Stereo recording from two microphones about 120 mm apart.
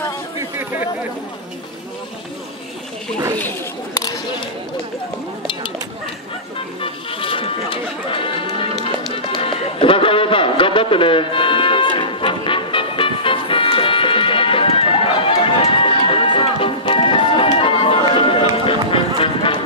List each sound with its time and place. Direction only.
6.8 s music: 50° left (ahead or behind)